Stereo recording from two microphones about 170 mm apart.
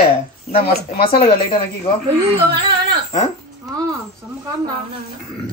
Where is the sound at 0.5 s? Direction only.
35° left (ahead or behind).